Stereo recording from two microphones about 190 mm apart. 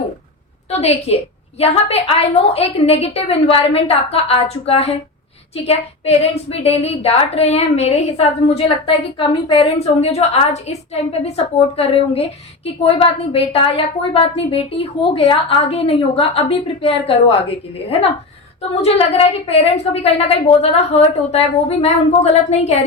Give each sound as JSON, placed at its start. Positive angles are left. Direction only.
{"t": 0.8, "sound": "a woman's voice", "side_deg": 35}